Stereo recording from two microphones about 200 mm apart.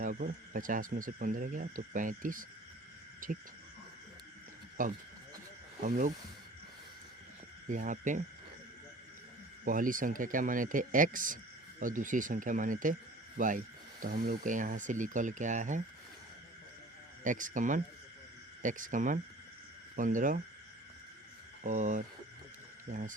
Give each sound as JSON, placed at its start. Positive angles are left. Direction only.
{"t": 0.0, "sound": "speech", "side_deg": -40}
{"t": 4.8, "sound": "speech", "side_deg": -40}
{"t": 7.7, "sound": "speech", "side_deg": -40}
{"t": 9.6, "sound": "speech", "side_deg": -40}
{"t": 17.2, "sound": "speech", "side_deg": -40}
{"t": 21.6, "sound": "speech", "side_deg": -40}